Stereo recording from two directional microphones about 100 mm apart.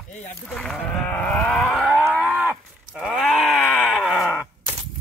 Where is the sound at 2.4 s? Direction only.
20° right (ahead or behind).